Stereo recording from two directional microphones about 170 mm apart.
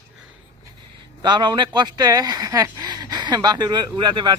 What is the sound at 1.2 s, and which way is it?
A man's voice, 25° right (ahead or behind).